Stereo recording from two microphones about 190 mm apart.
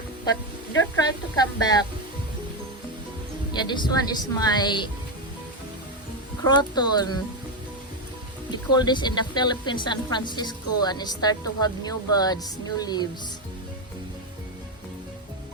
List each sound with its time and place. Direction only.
0.9 s speech: 20° left (ahead or behind)
3.5 s speech: 25° left (ahead or behind)
6.4 s speech: 25° left (ahead or behind)
8.4 s speech: 25° left (ahead or behind)